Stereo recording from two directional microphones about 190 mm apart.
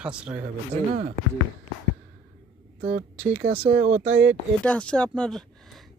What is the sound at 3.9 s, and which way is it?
Speech, 35° right (ahead or behind).